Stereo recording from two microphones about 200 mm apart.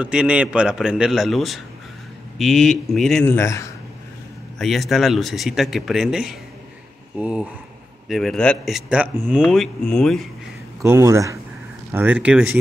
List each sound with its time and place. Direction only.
0.0 s speech: 5° right (ahead or behind); by 3.6 s 15° left (ahead or behind)
4.6 s speech: centre (ahead or behind)
9.4 s speech: 5° left (ahead or behind)
10.8 s speech: 15° right (ahead or behind)